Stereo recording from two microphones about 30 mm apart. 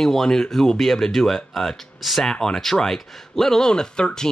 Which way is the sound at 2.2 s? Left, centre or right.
Centre.